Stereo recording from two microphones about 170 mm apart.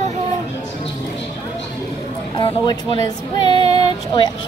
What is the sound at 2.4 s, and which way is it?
Speech, 25° left (ahead or behind).